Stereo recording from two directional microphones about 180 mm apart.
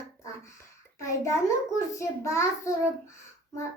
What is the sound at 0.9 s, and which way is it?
Speech, 15° left (ahead or behind).